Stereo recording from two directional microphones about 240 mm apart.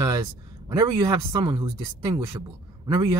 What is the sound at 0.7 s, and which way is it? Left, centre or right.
Speech, centre.